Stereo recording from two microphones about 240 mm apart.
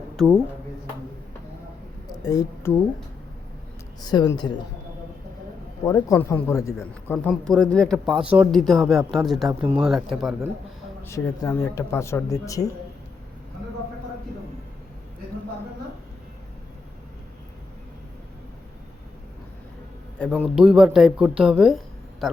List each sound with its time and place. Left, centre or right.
0.2 s speech: centre
2.2 s speech: centre
4.0 s speech: centre
5.8 s speech: centre
11.0 s speech: centre
20.1 s speech: centre